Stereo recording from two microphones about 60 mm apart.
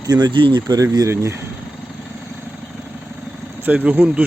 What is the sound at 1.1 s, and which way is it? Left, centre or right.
Speech, right.